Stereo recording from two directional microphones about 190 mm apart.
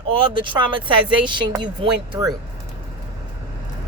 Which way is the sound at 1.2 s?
25° right (ahead or behind).